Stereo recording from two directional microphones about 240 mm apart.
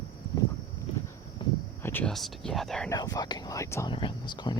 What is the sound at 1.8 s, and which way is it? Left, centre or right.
Speech, centre.